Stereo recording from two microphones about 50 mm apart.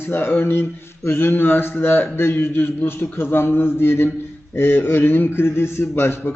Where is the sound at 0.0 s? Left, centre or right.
Left.